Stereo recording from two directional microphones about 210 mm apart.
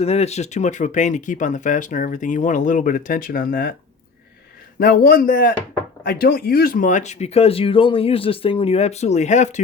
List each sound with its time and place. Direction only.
0.0 s speech: 30° left (ahead or behind)
4.8 s speech: 45° left (ahead or behind)